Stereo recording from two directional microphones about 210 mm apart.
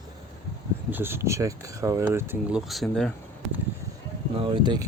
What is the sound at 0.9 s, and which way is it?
Speech, 10° right (ahead or behind).